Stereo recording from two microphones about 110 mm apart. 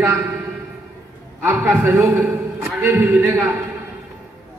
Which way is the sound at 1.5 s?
15° right (ahead or behind).